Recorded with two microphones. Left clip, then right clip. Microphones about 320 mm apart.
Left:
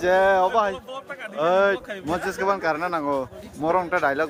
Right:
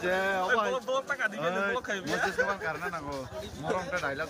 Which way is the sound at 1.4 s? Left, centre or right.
Centre.